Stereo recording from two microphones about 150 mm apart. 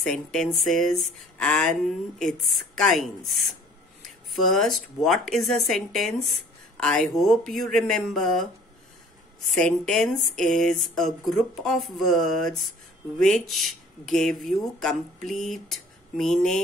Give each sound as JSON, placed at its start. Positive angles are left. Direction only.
{"t": 0.0, "sound": "speech", "side_deg": 5}
{"t": 9.5, "sound": "speech", "side_deg": 5}